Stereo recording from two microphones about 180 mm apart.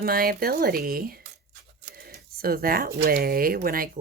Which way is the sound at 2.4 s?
55° right (ahead or behind).